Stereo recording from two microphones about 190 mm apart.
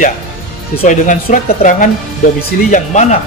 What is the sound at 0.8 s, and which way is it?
Speech, 45° left (ahead or behind).